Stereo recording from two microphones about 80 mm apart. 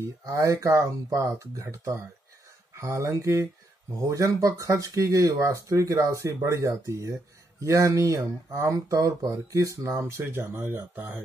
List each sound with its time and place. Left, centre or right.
0.2 s speech: right